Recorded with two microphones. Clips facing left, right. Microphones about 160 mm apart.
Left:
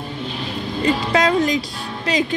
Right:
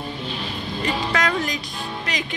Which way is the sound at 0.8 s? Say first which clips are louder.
Left 6 dB; 25° left (ahead or behind).